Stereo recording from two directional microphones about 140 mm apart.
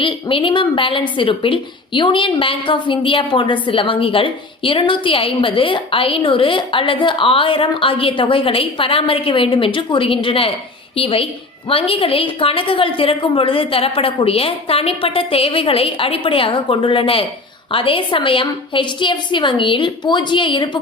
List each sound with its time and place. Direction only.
0.0 s a woman's voice: 40° left (ahead or behind)